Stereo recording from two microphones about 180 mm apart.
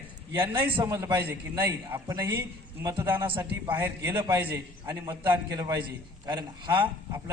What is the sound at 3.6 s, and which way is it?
A man's voice, 15° right (ahead or behind).